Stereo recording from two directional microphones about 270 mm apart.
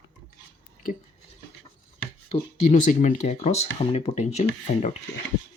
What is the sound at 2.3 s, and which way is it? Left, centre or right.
Speech, left.